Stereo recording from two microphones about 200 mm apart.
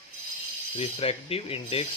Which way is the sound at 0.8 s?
30° left (ahead or behind).